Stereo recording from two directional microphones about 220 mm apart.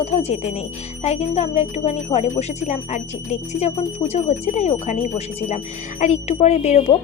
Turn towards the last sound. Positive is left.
turn(degrees=30)  # may be behind; listen again after turning